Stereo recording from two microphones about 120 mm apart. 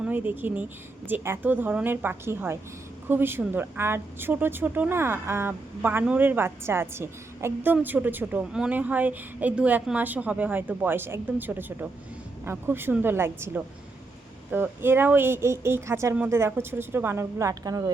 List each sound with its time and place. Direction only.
0.0 s speech: 15° right (ahead or behind); by 17.9 s 30° right (ahead or behind)